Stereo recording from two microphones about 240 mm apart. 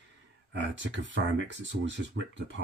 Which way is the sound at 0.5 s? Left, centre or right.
Right.